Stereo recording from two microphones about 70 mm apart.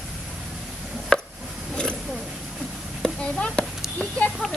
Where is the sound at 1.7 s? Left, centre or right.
Centre.